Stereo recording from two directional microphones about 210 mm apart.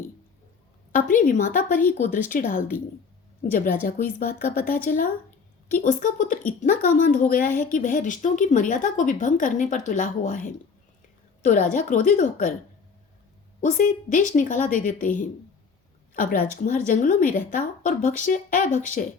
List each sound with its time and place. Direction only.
0.9 s a woman's voice: 40° left (ahead or behind)
3.8 s a woman's voice: 45° left (ahead or behind)
13.6 s a woman's voice: 35° left (ahead or behind)
16.1 s a woman's voice: 40° left (ahead or behind)